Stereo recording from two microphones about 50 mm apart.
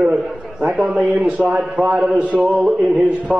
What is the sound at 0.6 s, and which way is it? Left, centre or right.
A man's voice, right.